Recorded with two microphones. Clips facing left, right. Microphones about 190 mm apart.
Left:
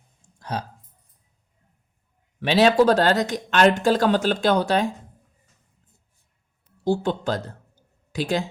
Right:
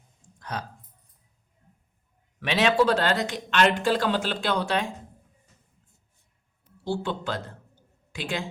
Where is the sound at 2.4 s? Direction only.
35° left (ahead or behind).